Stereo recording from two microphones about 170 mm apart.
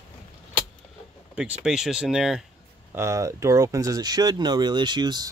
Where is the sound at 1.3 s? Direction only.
5° right (ahead or behind).